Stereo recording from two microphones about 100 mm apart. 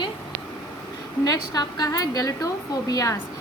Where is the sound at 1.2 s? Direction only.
40° left (ahead or behind).